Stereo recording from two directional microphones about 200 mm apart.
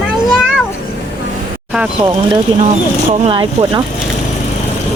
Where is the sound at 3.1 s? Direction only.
25° right (ahead or behind).